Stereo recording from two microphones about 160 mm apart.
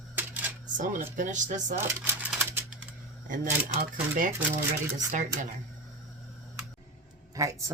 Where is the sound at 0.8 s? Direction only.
55° right (ahead or behind).